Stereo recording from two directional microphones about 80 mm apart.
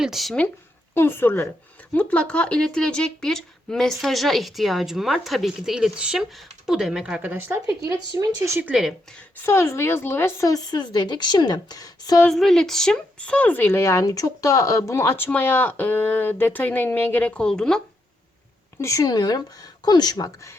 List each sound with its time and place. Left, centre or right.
0.0 s speech: centre
0.9 s speech: left
1.9 s speech: centre
7.2 s speech: right
8.4 s speech: right
8.9 s a woman's voice: centre
9.4 s speech: left
10.4 s a woman's voice: left
12.3 s a woman's voice: centre
13.7 s speech: left; by 17.8 s centre
18.8 s speech: left
19.0 s a woman's voice: left